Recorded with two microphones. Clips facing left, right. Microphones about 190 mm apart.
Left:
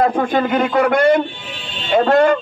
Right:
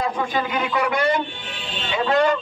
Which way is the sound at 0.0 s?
55° left (ahead or behind).